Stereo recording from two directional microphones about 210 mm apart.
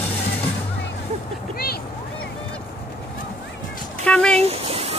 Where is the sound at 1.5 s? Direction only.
45° left (ahead or behind).